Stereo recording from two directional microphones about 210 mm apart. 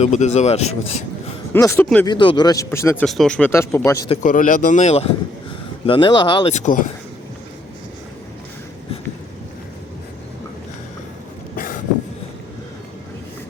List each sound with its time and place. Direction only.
0.0 s speech: 35° left (ahead or behind)
1.5 s speech: 10° left (ahead or behind)
2.0 s speech: 20° left (ahead or behind)
4.1 s speech: 40° left (ahead or behind)
5.8 s speech: 25° left (ahead or behind)
6.5 s speech: 35° left (ahead or behind)
11.5 s vehicle: 40° left (ahead or behind)